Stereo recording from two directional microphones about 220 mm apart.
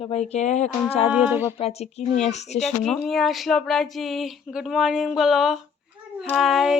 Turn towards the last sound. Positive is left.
turn(degrees=0)  # may be behind; listen again after turning